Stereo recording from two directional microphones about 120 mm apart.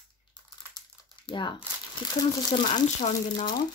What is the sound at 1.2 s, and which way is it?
Speech, 40° left (ahead or behind).